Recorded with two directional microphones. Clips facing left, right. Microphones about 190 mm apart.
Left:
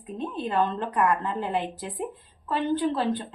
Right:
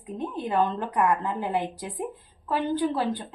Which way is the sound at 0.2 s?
15° right (ahead or behind).